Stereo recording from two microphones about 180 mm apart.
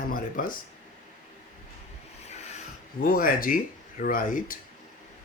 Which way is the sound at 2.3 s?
40° left (ahead or behind).